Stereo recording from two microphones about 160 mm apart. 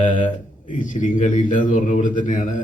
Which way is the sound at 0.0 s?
55° left (ahead or behind).